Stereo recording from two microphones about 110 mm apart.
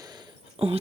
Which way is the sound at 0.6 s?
55° right (ahead or behind).